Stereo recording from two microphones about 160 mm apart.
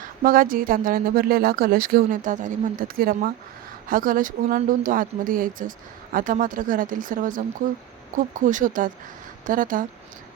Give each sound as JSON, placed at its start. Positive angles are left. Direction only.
{"t": 0.0, "sound": "speech", "side_deg": -60}